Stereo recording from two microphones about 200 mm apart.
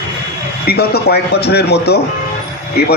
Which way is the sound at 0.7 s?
50° left (ahead or behind).